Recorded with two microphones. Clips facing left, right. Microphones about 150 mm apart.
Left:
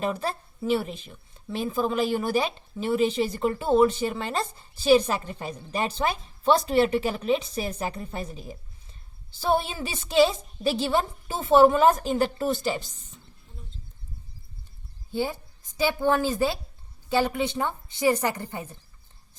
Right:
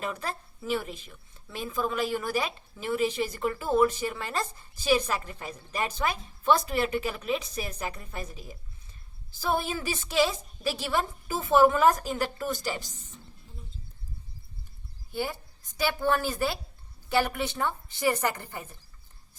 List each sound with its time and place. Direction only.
0.0 s speech: 30° left (ahead or behind)
15.1 s a woman's voice: 20° left (ahead or behind)